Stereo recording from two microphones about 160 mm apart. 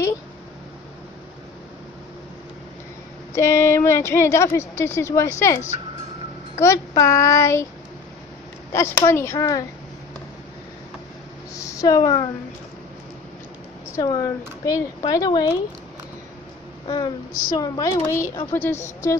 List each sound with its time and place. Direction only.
3.3 s a woman's voice: 20° left (ahead or behind)
8.7 s a woman's voice: 15° left (ahead or behind)
11.5 s speech: 20° left (ahead or behind)
13.9 s speech: 20° left (ahead or behind)
16.8 s a woman's voice: 25° left (ahead or behind)